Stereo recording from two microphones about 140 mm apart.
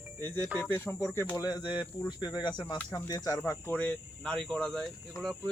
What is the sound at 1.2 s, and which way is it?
Speech, 30° left (ahead or behind).